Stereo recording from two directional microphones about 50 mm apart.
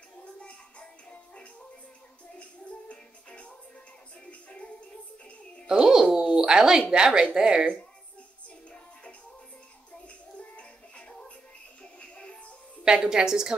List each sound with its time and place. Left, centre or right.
0.2 s music: left
2.9 s music: left
5.7 s speech: centre
10.0 s music: left
12.8 s speech: centre